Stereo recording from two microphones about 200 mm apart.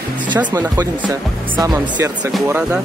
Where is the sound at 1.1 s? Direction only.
20° right (ahead or behind).